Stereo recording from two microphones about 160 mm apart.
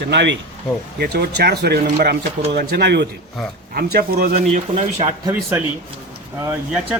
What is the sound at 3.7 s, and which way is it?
Speech, 70° right (ahead or behind).